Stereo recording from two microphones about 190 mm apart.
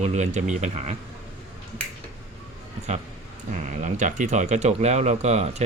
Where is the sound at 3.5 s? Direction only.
40° right (ahead or behind).